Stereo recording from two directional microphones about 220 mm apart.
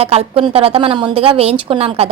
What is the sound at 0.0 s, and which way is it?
A woman's voice, 25° right (ahead or behind).